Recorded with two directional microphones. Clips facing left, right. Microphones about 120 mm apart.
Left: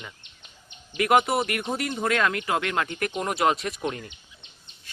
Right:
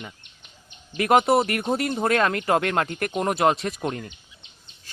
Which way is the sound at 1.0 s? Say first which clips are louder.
Right 3 dB; 35° right (ahead or behind).